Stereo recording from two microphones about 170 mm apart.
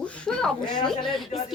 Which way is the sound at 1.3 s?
40° left (ahead or behind).